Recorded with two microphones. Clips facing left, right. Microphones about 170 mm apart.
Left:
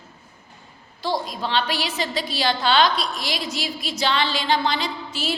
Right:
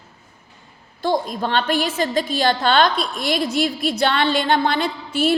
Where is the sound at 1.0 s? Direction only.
50° right (ahead or behind).